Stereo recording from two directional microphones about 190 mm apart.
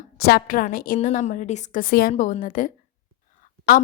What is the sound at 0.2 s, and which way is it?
A woman's voice, 55° left (ahead or behind).